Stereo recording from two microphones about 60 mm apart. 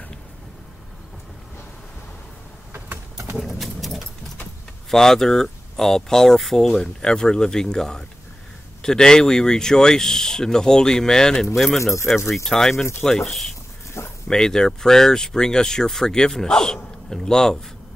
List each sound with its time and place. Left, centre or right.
3.3 s a sound: centre
4.9 s speech: centre
11.8 s speech: left
12.4 s speech: centre